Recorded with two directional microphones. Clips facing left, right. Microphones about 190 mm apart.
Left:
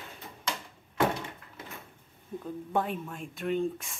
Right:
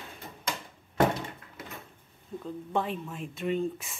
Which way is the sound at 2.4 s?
5° left (ahead or behind).